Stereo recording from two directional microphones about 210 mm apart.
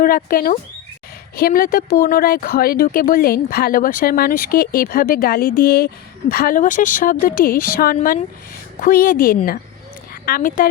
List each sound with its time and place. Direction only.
0.0 s a woman's voice: 40° left (ahead or behind)